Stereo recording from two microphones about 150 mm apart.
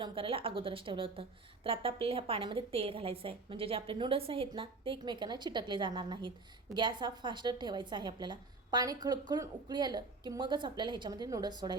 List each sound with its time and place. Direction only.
0.0 s a woman's voice: 35° right (ahead or behind)